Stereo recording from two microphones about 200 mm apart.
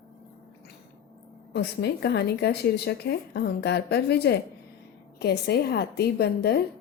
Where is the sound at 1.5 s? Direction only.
55° left (ahead or behind).